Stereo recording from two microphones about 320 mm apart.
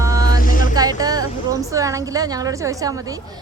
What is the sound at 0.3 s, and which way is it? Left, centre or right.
Music, left.